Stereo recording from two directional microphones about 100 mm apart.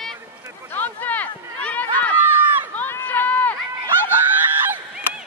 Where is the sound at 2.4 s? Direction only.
20° right (ahead or behind).